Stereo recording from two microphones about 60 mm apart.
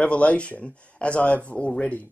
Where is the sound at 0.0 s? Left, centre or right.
Left.